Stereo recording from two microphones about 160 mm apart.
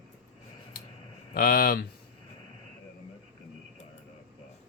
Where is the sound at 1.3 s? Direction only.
65° left (ahead or behind).